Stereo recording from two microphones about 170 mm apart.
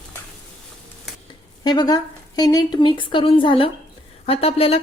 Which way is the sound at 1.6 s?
25° left (ahead or behind).